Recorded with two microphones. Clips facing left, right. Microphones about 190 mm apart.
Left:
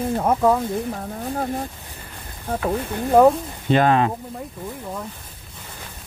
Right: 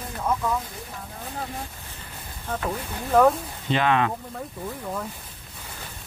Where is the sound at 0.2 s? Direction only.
55° left (ahead or behind).